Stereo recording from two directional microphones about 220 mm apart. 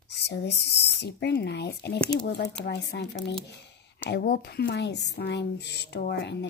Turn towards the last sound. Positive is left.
turn(degrees=50)  # may be behind; listen again after turning